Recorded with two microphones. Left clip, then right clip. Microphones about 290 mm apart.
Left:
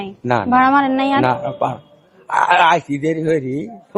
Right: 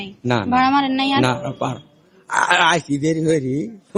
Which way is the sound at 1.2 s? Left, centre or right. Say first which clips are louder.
Left 4 dB; right.